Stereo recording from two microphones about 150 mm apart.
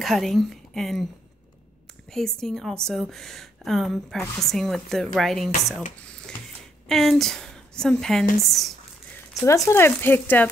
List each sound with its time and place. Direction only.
0.0 s a woman's voice: centre (ahead or behind)
2.0 s a woman's voice: 5° left (ahead or behind)
6.9 s a woman's voice: centre (ahead or behind)
9.7 s speech: 15° left (ahead or behind)